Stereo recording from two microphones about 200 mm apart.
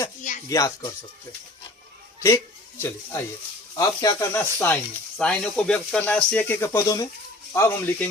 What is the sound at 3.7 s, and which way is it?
Speech, 15° left (ahead or behind).